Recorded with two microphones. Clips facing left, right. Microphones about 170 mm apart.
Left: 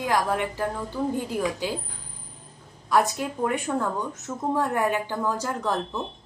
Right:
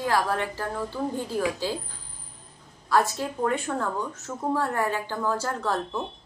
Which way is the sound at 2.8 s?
15° left (ahead or behind).